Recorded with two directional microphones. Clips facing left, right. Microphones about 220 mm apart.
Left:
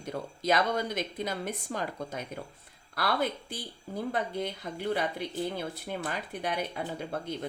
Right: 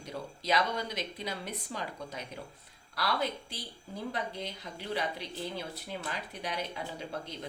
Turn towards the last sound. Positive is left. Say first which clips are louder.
# left 4 dB
turn(degrees=55)  # may be behind; listen again after turning